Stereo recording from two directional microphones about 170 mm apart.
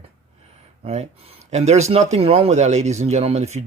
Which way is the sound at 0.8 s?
40° right (ahead or behind).